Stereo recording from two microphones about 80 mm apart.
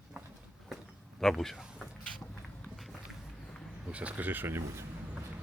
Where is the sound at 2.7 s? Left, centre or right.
Centre.